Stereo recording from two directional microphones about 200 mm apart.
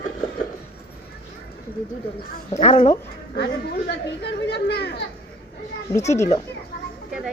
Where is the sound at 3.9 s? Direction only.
55° left (ahead or behind).